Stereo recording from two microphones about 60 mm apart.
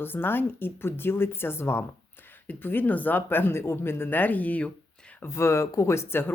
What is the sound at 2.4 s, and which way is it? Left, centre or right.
Speech, left.